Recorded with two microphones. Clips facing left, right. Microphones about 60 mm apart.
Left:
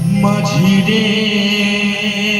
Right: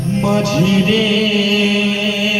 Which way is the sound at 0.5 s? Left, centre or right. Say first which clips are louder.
Left 1 dB; left.